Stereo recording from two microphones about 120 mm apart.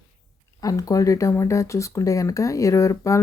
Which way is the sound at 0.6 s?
30° left (ahead or behind).